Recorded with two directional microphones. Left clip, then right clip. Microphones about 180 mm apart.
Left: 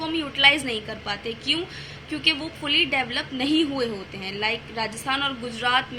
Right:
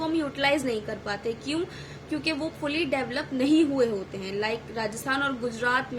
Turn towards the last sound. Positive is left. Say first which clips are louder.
# left 3 dB
turn(degrees=-25)  # may be behind; listen again after turning